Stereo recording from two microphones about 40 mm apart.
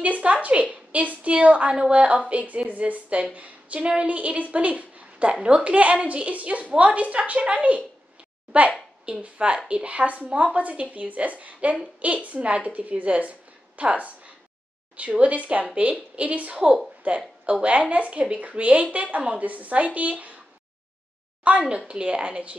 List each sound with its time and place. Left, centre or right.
0.0 s a woman's voice: right
21.6 s speech: right